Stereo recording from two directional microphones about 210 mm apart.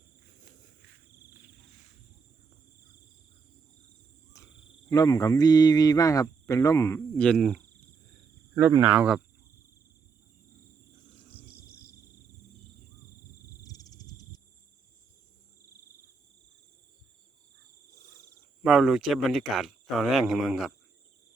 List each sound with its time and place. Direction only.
4.4 s cricket: 15° left (ahead or behind)
4.9 s speech: 15° left (ahead or behind)
8.5 s speech: 15° right (ahead or behind)
13.6 s cricket: 15° left (ahead or behind)
18.6 s speech: centre (ahead or behind)